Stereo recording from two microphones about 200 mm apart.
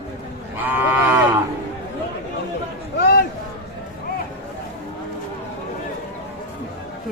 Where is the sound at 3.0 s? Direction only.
55° left (ahead or behind).